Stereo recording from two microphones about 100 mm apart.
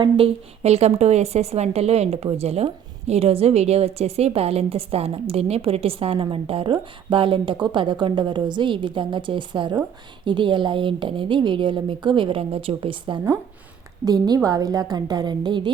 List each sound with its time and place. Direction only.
0.0 s a woman's voice: 75° right (ahead or behind); by 13.2 s 55° right (ahead or behind)
14.0 s a woman's voice: 40° right (ahead or behind)